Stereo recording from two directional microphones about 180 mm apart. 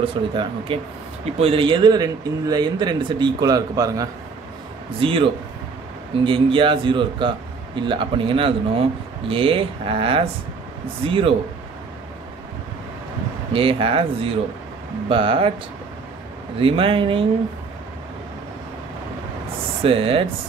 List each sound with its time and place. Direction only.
0.0 s speech: 30° right (ahead or behind)
5.0 s speech: 30° right (ahead or behind)
13.5 s speech: 30° right (ahead or behind)
16.5 s speech: 30° right (ahead or behind)
19.8 s speech: 30° right (ahead or behind)